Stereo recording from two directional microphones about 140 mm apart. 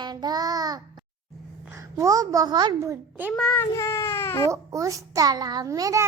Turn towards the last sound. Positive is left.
turn(degrees=-25)  # may be behind; listen again after turning